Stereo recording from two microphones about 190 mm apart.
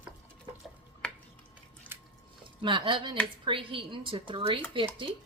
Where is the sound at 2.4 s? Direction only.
25° right (ahead or behind).